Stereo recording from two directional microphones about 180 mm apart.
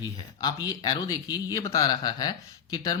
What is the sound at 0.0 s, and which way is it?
Speech, 20° left (ahead or behind).